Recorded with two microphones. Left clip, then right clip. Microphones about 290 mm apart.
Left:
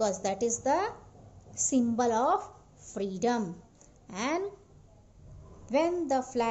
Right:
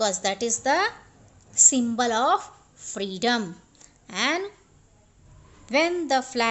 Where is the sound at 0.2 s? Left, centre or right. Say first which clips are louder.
Right 4 dB; right.